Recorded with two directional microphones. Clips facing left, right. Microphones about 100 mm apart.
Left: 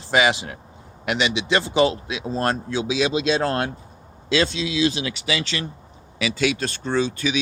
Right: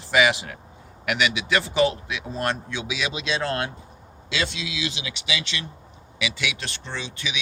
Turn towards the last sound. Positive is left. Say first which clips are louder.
# left 11 dB
turn(degrees=40)  # may be behind; listen again after turning